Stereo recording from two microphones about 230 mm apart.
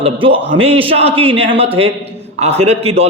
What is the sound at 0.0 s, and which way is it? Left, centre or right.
A man's voice, right.